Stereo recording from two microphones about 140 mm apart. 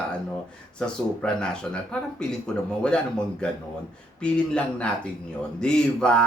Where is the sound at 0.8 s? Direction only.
5° left (ahead or behind).